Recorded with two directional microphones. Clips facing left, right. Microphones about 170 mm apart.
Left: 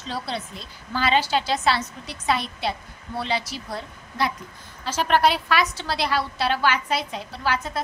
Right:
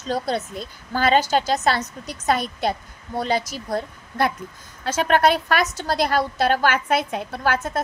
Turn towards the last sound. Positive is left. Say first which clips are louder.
# right 3 dB
turn(degrees=-50)  # may be behind; listen again after turning